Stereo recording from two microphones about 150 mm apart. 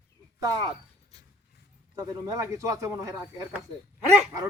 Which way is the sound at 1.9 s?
20° right (ahead or behind).